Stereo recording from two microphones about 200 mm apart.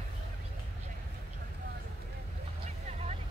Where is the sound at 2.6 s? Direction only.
35° right (ahead or behind).